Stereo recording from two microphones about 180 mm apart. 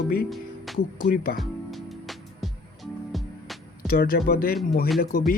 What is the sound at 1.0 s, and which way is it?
Speech, 55° left (ahead or behind).